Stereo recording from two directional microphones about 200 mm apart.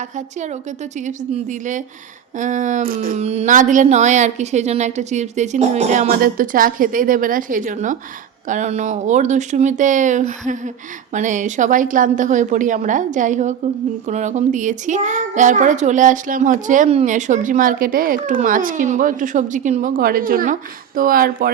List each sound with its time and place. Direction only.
1.0 s a child's voice: 40° right (ahead or behind)